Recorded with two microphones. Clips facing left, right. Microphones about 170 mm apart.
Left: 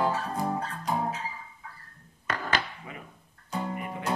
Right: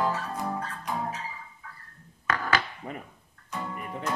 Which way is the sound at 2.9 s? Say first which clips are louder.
Right 5 dB; 45° right (ahead or behind).